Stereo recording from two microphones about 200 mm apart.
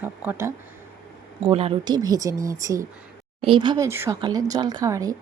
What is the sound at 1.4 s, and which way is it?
Speech, 30° right (ahead or behind).